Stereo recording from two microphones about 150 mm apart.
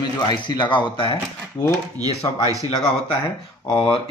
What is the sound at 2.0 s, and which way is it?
Speech, 25° right (ahead or behind).